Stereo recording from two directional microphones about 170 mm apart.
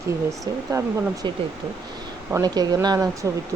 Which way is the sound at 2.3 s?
20° right (ahead or behind).